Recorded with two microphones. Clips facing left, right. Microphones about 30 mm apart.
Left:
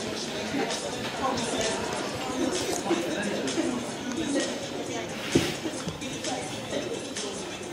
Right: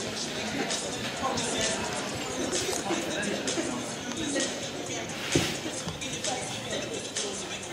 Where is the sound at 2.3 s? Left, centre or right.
Centre.